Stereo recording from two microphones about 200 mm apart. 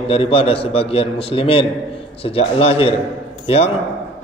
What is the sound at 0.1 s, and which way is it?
A man's voice, 30° left (ahead or behind).